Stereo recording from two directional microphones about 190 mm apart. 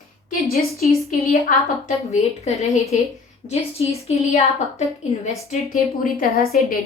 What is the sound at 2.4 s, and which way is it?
A woman's voice, 35° left (ahead or behind).